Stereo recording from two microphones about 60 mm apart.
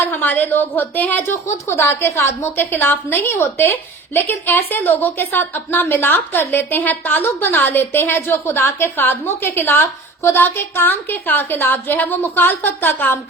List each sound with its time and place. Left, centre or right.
0.1 s a woman's voice: left
1.3 s a woman's voice: left